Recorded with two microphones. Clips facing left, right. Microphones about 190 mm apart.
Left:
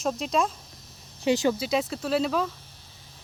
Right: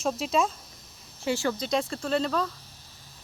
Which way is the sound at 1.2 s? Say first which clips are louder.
Left 5 dB; 15° left (ahead or behind).